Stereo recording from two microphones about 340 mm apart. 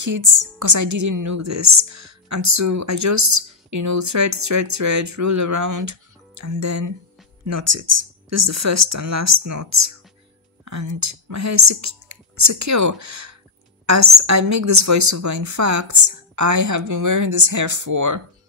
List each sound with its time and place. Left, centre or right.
0.0 s a woman's voice: right